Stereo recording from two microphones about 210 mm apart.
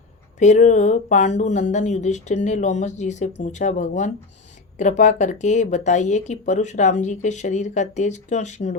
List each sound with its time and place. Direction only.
0.3 s speech: 35° left (ahead or behind)